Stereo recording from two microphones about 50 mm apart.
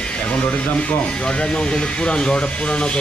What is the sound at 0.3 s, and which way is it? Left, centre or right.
Speech, left.